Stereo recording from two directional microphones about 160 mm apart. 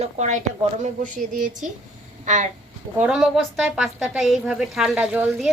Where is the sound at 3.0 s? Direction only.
5° right (ahead or behind).